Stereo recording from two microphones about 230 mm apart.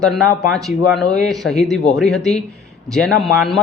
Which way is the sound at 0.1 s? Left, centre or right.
Centre.